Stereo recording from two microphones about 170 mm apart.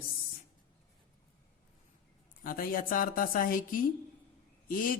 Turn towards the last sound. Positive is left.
turn(degrees=55)  # may be behind; listen again after turning